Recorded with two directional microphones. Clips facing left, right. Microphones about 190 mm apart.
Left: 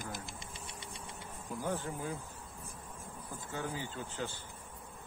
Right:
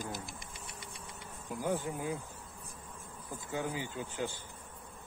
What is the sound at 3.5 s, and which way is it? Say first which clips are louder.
Speech: right 3 dB; 15° right (ahead or behind).